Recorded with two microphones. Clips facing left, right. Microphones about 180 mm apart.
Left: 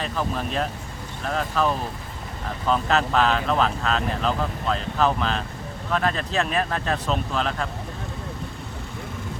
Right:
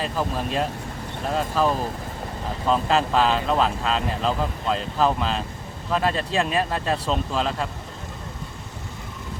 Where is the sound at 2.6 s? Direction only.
30° right (ahead or behind).